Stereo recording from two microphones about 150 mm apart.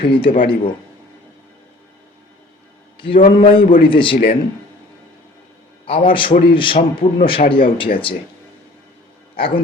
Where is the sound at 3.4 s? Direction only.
35° left (ahead or behind).